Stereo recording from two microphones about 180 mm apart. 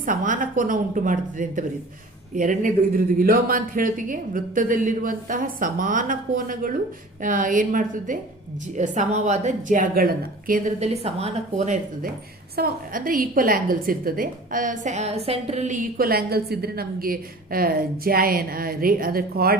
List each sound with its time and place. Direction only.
0.0 s a woman's voice: 50° right (ahead or behind)
10.8 s speech: 35° right (ahead or behind)
12.5 s a woman's voice: 55° right (ahead or behind)